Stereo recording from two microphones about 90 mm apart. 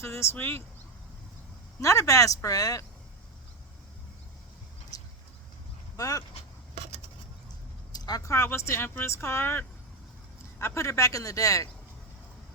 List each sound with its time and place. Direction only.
0.0 s speech: 30° left (ahead or behind)
1.8 s speech: 35° left (ahead or behind)
6.0 s speech: 40° left (ahead or behind)
7.9 s vehicle: 45° left (ahead or behind)
8.2 s speech: 30° left (ahead or behind)